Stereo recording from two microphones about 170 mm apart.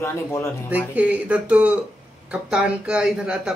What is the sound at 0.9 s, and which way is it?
Speech, 10° right (ahead or behind).